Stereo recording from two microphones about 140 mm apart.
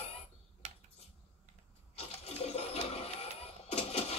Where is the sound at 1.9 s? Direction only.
45° left (ahead or behind).